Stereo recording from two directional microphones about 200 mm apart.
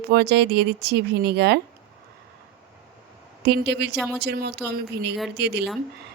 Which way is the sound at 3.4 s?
55° right (ahead or behind).